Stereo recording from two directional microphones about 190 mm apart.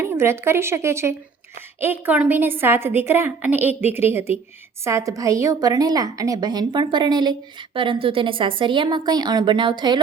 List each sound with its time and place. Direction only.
0.0 s a woman's voice: 10° right (ahead or behind)